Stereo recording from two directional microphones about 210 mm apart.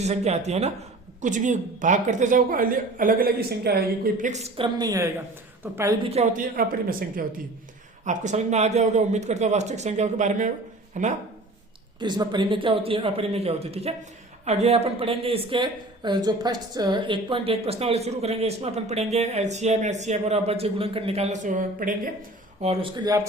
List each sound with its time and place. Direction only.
0.0 s a woman's voice: 30° right (ahead or behind)
6.1 s speech: 30° right (ahead or behind)
8.0 s speech: 35° right (ahead or behind)
11.9 s speech: 20° right (ahead or behind); by 22.1 s 40° right (ahead or behind)
22.6 s speech: 30° right (ahead or behind)